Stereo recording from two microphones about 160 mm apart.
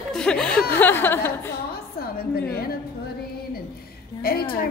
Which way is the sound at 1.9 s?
70° left (ahead or behind).